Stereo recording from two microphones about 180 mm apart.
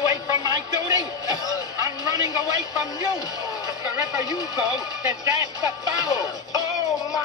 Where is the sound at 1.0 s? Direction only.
20° left (ahead or behind).